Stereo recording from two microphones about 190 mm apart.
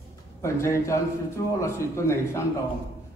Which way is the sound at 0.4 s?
15° left (ahead or behind).